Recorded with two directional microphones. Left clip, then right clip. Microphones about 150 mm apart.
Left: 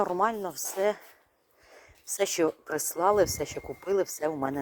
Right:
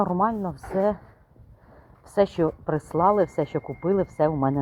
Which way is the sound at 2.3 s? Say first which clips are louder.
Right 3 dB; 25° left (ahead or behind).